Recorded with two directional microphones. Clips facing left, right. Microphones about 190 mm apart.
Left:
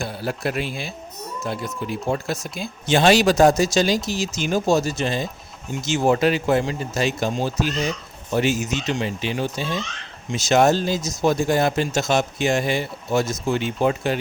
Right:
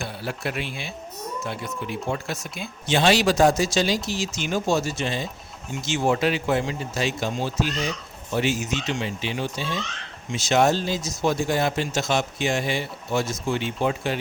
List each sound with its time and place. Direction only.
0.0 s speech: 40° left (ahead or behind)